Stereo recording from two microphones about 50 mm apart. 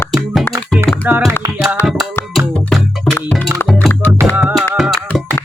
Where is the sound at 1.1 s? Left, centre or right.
Right.